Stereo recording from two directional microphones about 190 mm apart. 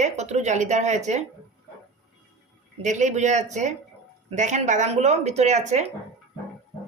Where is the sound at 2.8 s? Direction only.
40° right (ahead or behind).